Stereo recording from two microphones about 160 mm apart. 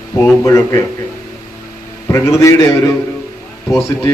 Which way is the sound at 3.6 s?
15° left (ahead or behind).